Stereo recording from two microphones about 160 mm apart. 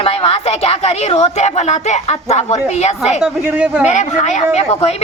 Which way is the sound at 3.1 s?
5° right (ahead or behind).